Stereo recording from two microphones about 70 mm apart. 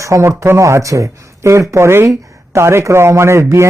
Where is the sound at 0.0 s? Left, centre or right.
Right.